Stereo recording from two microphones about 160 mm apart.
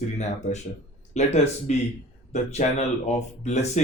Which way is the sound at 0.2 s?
45° left (ahead or behind).